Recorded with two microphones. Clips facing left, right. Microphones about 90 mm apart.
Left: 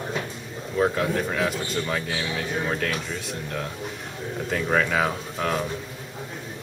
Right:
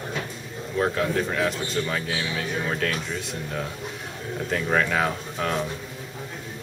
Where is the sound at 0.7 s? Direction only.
5° left (ahead or behind).